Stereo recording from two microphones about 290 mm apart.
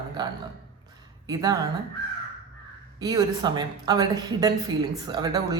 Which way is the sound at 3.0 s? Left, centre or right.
Centre.